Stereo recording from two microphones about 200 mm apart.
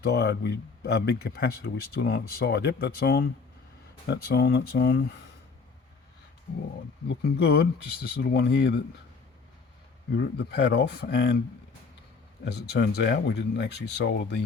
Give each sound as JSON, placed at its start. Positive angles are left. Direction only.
{"t": 0.0, "sound": "speech", "side_deg": 55}
{"t": 7.1, "sound": "speech", "side_deg": 55}
{"t": 10.2, "sound": "speech", "side_deg": 55}
{"t": 12.5, "sound": "speech", "side_deg": 55}